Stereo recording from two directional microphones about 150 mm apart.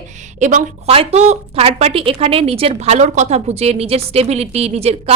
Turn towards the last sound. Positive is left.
turn(degrees=-45)  # may be behind; listen again after turning